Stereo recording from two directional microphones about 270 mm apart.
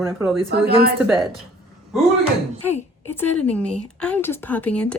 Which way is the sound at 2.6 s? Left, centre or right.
Centre.